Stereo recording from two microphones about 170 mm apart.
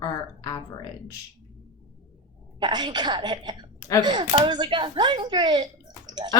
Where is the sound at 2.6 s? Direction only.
25° right (ahead or behind).